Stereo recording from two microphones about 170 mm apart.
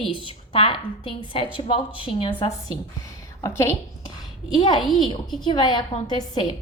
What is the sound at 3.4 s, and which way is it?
Speech, 15° left (ahead or behind).